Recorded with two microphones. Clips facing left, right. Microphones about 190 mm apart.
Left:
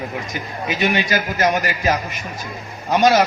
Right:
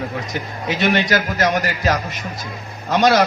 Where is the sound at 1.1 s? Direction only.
65° right (ahead or behind).